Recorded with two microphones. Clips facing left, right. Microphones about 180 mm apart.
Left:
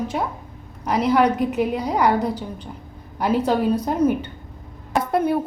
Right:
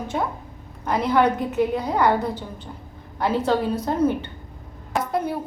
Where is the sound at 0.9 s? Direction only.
10° left (ahead or behind).